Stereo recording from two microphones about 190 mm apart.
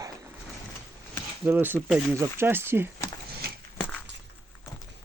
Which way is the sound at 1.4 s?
10° right (ahead or behind).